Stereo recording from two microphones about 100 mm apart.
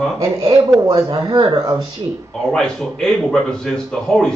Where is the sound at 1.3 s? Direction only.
50° right (ahead or behind).